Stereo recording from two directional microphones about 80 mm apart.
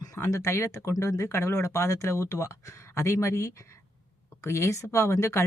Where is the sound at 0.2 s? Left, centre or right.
Left.